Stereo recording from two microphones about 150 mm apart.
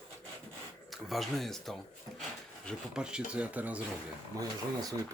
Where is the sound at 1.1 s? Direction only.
Centre (ahead or behind).